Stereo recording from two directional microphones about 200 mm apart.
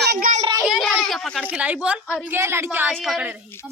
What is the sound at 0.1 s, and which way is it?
Child singing, 45° right (ahead or behind).